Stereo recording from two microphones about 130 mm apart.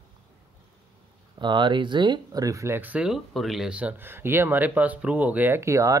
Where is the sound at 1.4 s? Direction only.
35° right (ahead or behind).